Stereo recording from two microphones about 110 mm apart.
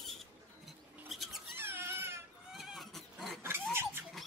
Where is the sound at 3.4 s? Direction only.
20° right (ahead or behind).